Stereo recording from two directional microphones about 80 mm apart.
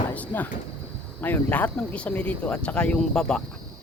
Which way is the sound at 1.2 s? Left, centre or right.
Left.